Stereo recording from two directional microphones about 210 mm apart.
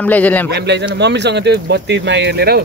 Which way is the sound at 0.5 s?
55° right (ahead or behind).